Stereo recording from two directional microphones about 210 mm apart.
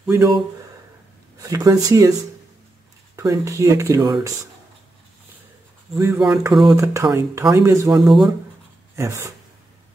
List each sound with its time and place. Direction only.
0.0 s speech: 5° right (ahead or behind)
1.4 s speech: 15° right (ahead or behind)
3.2 s speech: 15° right (ahead or behind)
6.1 s speech: centre (ahead or behind)
6.6 s speech: 15° right (ahead or behind)
8.0 s speech: centre (ahead or behind)
8.9 s speech: 15° right (ahead or behind)